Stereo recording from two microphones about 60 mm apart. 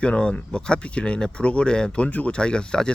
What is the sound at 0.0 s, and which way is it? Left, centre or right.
Speech, centre.